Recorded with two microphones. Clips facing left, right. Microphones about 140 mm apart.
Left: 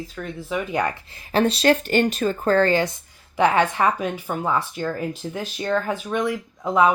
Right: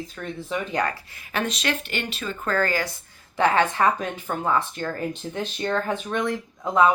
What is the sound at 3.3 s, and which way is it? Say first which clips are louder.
Speech: left 2 dB; 15° left (ahead or behind).